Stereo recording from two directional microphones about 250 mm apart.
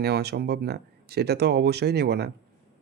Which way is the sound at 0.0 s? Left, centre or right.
Right.